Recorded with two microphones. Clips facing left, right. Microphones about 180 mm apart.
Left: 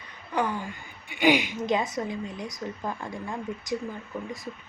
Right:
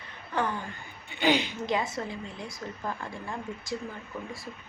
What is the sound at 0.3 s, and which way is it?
A woman's voice, 15° left (ahead or behind).